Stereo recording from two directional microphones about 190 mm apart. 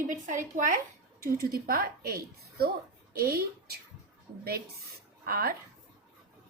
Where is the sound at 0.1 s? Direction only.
40° right (ahead or behind).